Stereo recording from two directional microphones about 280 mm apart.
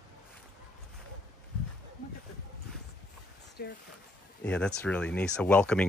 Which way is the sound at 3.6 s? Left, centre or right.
Left.